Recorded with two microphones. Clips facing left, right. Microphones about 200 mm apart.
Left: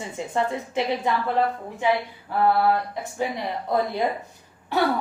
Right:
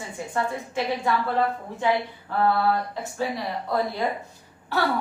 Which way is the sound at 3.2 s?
20° left (ahead or behind).